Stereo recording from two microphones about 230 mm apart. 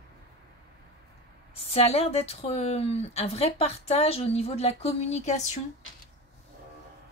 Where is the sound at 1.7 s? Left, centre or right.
Left.